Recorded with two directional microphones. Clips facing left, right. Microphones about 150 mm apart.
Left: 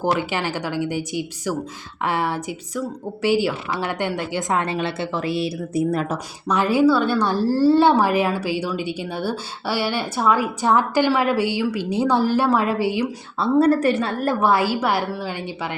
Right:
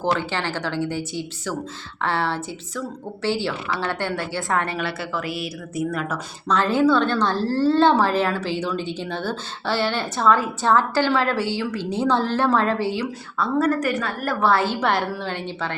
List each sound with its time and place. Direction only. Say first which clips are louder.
0.0 s a woman's voice: left 2 dB; 15° left (ahead or behind); by 6.1 s 30° left (ahead or behind)
6.5 s a woman's voice: left 1 dB; 10° left (ahead or behind)
13.4 s a woman's voice: left 4 dB; 30° left (ahead or behind)
14.4 s a woman's voice: right 1 dB; 10° left (ahead or behind)